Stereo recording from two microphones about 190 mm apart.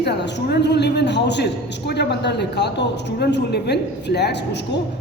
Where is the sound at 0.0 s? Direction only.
60° left (ahead or behind).